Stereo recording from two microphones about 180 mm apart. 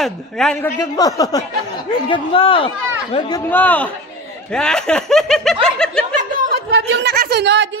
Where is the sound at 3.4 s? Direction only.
10° left (ahead or behind).